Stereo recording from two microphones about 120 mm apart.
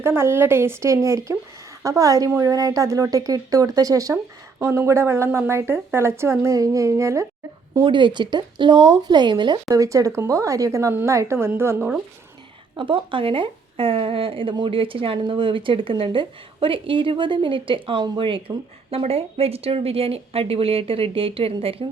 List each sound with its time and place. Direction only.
0.0 s speech: 20° right (ahead or behind)
7.9 s speech: 40° right (ahead or behind); by 11.9 s 15° right (ahead or behind)
12.7 s speech: 45° right (ahead or behind)